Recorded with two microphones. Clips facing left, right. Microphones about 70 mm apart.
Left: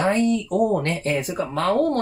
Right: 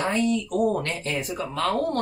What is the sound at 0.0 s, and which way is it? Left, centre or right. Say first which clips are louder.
Speech: left 4 dB; left.